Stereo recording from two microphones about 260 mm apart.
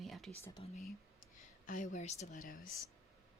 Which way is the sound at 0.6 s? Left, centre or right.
Left.